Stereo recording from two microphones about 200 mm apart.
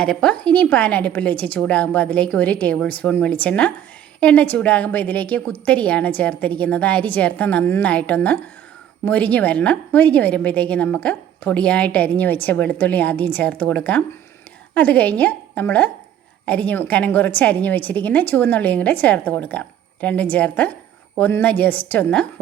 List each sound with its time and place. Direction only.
0.0 s a woman's voice: 5° left (ahead or behind)